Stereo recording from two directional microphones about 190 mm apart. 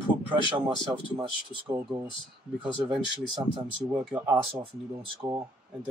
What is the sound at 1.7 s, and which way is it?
Speech, 15° right (ahead or behind).